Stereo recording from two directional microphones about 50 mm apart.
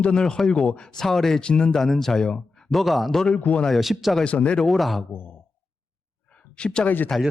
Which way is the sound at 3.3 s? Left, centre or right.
Left.